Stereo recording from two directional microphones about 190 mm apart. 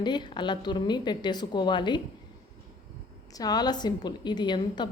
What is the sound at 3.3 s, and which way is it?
A woman's voice, 20° left (ahead or behind).